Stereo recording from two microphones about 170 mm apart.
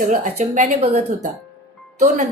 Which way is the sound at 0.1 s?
45° right (ahead or behind).